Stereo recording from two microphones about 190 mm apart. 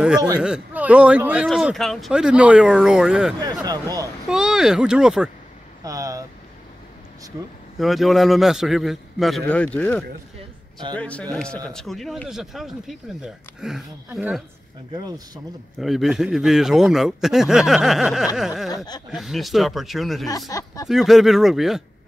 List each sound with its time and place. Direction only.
0.4 s speech: 5° right (ahead or behind)
3.6 s speech: 20° right (ahead or behind)
4.3 s speech: 5° right (ahead or behind)
5.9 s vehicle: 15° right (ahead or behind)
7.8 s speech: centre (ahead or behind)
15.0 s speech: 20° right (ahead or behind)
15.8 s speech: centre (ahead or behind)
20.2 s speech: 20° left (ahead or behind)
20.9 s speech: centre (ahead or behind)